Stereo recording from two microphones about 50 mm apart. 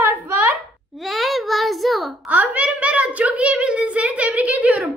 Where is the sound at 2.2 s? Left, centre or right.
Right.